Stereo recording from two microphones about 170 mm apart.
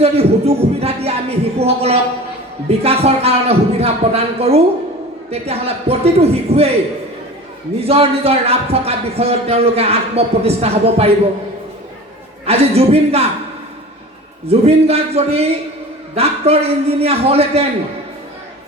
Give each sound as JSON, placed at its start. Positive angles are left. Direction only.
{"t": 0.0, "sound": "a sound", "side_deg": -35}
{"t": 2.6, "sound": "speech", "side_deg": -35}
{"t": 7.9, "sound": "speech", "side_deg": -35}
{"t": 12.5, "sound": "speech", "side_deg": -35}
{"t": 14.4, "sound": "speech", "side_deg": -35}